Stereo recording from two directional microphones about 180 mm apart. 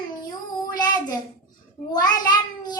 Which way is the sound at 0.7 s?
25° left (ahead or behind).